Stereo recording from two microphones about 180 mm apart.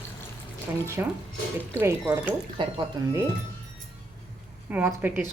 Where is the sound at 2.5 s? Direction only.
25° right (ahead or behind).